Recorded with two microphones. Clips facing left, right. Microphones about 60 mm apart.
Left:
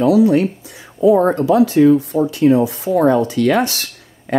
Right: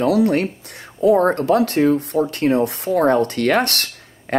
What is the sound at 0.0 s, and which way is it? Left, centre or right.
Speech, right.